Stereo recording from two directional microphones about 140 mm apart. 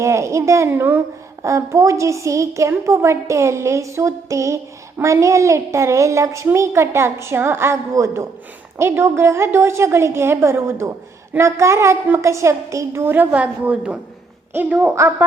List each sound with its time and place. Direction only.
0.0 s a woman's voice: 20° right (ahead or behind)